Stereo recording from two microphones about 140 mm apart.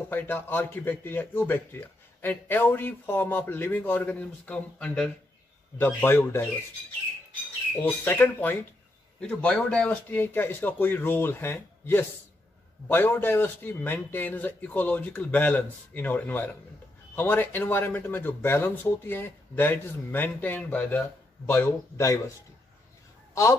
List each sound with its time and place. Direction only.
0.1 s speech: 15° left (ahead or behind)
7.8 s speech: 15° left (ahead or behind)